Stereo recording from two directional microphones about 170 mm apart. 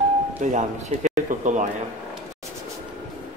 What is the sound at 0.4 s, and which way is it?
Speech, 45° right (ahead or behind).